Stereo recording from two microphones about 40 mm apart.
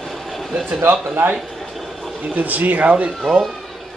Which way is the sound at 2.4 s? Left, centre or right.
Right.